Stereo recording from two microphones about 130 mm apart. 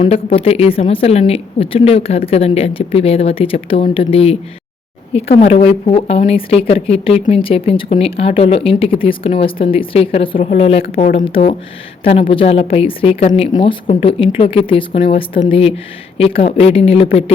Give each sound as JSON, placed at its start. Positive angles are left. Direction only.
{"t": 0.0, "sound": "speech", "side_deg": 50}
{"t": 5.4, "sound": "speech", "side_deg": 55}
{"t": 12.3, "sound": "speech", "side_deg": 45}
{"t": 13.5, "sound": "a woman's voice", "side_deg": 35}